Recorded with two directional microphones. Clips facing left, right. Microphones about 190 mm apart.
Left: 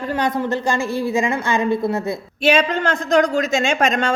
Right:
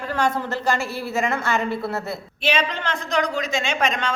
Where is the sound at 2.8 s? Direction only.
45° left (ahead or behind).